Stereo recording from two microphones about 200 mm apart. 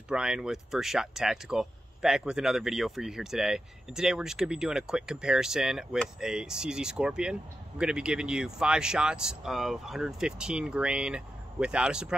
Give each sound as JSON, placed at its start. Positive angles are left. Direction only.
{"t": 0.1, "sound": "speech", "side_deg": -5}